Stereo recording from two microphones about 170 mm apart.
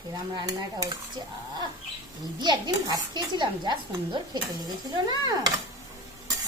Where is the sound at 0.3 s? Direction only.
25° right (ahead or behind).